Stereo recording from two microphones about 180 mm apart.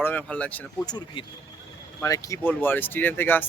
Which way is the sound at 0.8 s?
25° left (ahead or behind).